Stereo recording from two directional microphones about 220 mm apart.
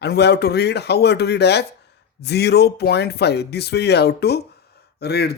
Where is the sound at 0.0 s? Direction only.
50° left (ahead or behind).